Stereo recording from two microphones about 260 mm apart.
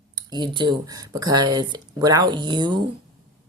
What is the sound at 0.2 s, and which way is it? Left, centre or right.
Speech, centre.